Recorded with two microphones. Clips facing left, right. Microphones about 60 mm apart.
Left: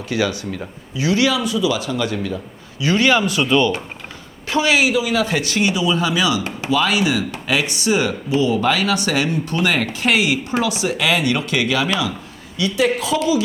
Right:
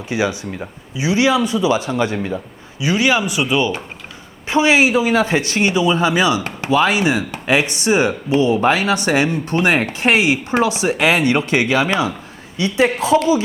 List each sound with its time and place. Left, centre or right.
0.1 s speech: right
4.4 s speech: right